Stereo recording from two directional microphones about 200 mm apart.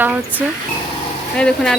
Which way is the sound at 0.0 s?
10° right (ahead or behind).